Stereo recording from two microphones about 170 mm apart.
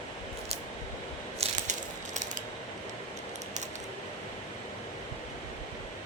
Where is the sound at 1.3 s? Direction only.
45° right (ahead or behind).